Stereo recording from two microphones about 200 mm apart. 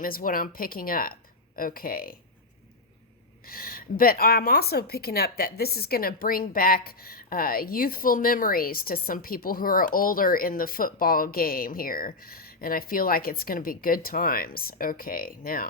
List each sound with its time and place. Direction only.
0.0 s a woman's voice: 45° left (ahead or behind)
3.4 s a woman's voice: 45° left (ahead or behind)